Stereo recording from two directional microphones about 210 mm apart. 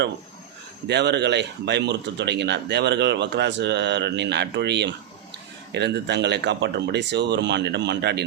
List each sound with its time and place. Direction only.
0.9 s speech: 55° right (ahead or behind)